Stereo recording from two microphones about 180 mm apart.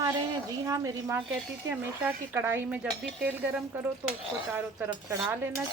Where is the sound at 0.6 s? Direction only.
15° right (ahead or behind).